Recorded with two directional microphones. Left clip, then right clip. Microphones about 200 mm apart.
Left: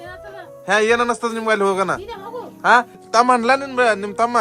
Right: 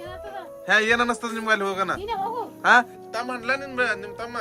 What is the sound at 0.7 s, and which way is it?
A man's voice, 15° left (ahead or behind).